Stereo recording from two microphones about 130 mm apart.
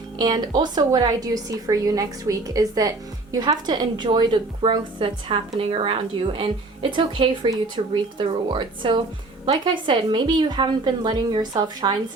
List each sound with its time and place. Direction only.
0.2 s a woman's voice: 35° right (ahead or behind)